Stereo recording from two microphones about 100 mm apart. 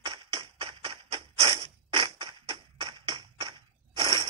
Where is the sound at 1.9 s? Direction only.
55° right (ahead or behind).